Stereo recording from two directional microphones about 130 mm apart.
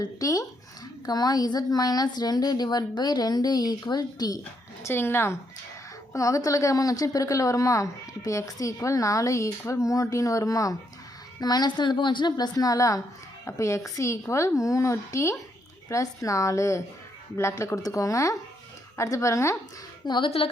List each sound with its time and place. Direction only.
0.0 s a woman's voice: 25° left (ahead or behind)
4.8 s a woman's voice: 20° left (ahead or behind)
20.1 s a woman's voice: 40° left (ahead or behind)